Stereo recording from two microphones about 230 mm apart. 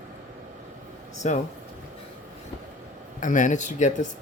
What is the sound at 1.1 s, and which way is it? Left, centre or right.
Speech, left.